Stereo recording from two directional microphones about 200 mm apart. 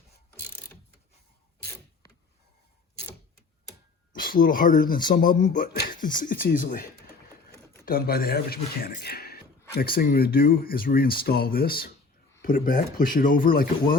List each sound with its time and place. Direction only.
4.1 s speech: 45° left (ahead or behind)